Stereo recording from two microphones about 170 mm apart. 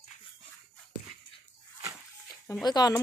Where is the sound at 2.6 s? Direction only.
25° left (ahead or behind).